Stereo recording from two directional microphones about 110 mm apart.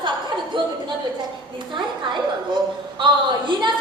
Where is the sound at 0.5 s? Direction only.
45° right (ahead or behind).